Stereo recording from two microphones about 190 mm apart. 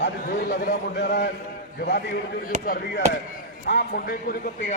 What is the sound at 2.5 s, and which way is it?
Speech, 40° right (ahead or behind).